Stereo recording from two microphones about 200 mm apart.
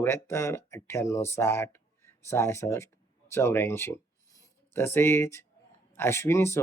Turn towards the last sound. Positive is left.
turn(degrees=15)  # may be behind; listen again after turning